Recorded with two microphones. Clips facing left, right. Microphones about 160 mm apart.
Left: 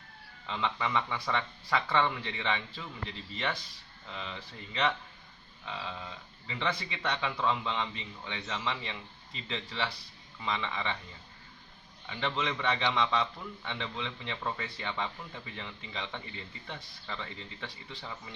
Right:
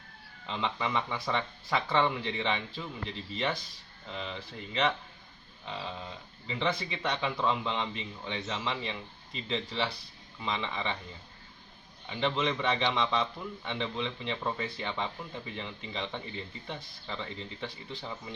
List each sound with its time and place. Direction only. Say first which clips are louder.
0.4 s speech: even; 20° right (ahead or behind)
12.0 s speech: right 3 dB; 20° right (ahead or behind)